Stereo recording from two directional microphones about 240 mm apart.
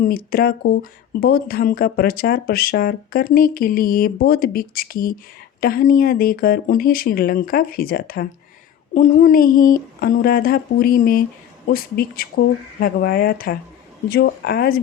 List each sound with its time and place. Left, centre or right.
0.0 s speech: left